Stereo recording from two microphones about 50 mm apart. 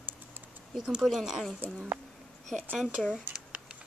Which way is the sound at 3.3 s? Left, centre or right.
Centre.